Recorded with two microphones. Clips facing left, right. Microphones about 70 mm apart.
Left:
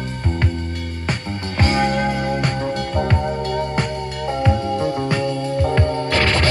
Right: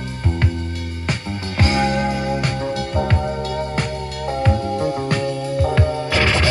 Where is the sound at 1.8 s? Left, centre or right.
Left.